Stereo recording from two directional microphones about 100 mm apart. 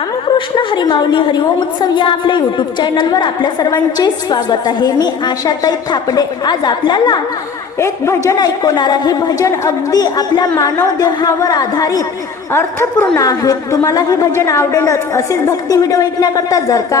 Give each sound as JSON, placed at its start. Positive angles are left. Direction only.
{"t": 0.3, "sound": "a woman's voice", "side_deg": 55}
{"t": 7.8, "sound": "speech", "side_deg": 25}
{"t": 8.4, "sound": "a woman's voice", "side_deg": 45}
{"t": 12.5, "sound": "a woman's voice", "side_deg": 25}
{"t": 14.3, "sound": "a woman's voice", "side_deg": 25}